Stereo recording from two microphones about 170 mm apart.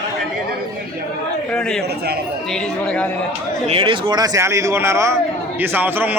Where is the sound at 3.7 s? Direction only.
30° right (ahead or behind); by 6.1 s 10° right (ahead or behind).